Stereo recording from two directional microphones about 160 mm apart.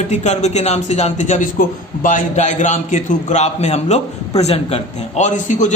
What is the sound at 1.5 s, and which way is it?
A man's voice, 55° left (ahead or behind).